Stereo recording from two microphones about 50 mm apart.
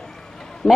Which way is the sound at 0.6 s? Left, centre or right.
Centre.